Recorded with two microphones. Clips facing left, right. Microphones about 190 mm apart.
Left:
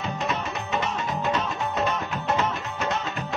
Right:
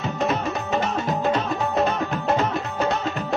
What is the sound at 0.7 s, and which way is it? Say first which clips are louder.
Music: right 4 dB; 40° right (ahead or behind).